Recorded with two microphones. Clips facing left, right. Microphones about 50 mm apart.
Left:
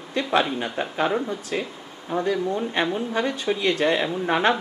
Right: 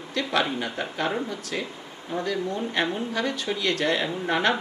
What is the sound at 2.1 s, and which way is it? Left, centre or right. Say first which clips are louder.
Speech: left 4 dB; left.